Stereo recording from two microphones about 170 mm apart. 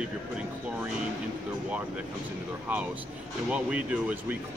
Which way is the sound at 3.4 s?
5° right (ahead or behind).